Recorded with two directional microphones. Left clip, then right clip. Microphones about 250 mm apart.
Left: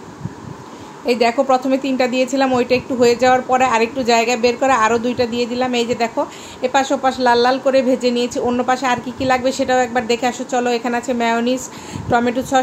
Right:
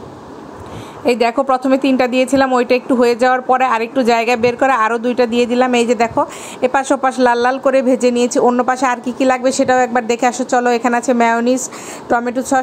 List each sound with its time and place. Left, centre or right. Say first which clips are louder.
1.0 s a woman's voice: right 1 dB; centre